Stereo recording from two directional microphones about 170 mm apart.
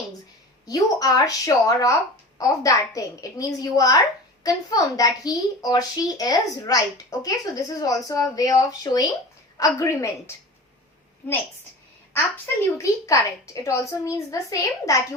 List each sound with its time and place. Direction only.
0.7 s a woman's voice: 20° left (ahead or behind)
12.7 s a woman's voice: 20° left (ahead or behind)